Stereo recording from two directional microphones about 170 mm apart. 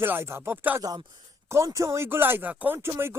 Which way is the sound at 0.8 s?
20° right (ahead or behind).